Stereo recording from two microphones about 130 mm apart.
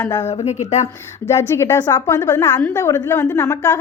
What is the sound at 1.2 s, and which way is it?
A woman's voice, 20° left (ahead or behind).